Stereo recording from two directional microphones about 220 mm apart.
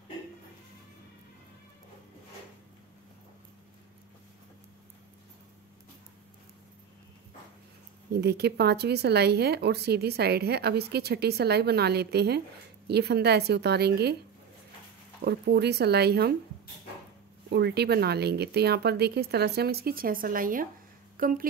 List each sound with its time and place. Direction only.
8.1 s speech: 50° right (ahead or behind)
15.2 s speech: 50° right (ahead or behind)
17.5 s speech: 50° right (ahead or behind)